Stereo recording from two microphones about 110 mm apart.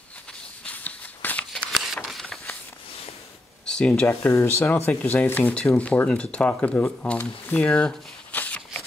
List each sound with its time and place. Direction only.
0.7 s a sound: 15° left (ahead or behind)
3.6 s speech: 5° left (ahead or behind)
4.1 s speech: 25° left (ahead or behind)